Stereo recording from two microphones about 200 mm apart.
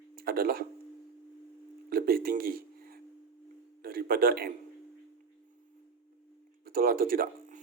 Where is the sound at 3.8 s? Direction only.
50° right (ahead or behind).